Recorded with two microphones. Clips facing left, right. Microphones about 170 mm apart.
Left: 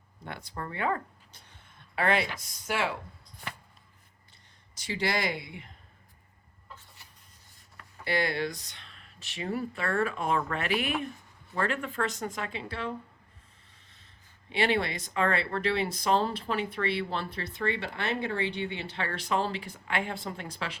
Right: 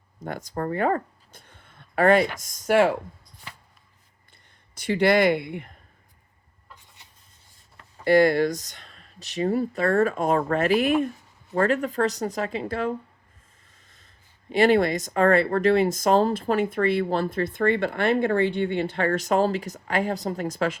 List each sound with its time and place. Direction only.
0.2 s speech: 45° right (ahead or behind)
4.7 s speech: 60° right (ahead or behind)
6.7 s chicken: 20° right (ahead or behind)
8.0 s speech: 45° right (ahead or behind)
14.5 s speech: 45° right (ahead or behind)